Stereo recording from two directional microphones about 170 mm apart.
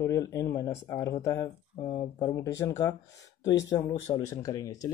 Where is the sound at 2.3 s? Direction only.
20° left (ahead or behind).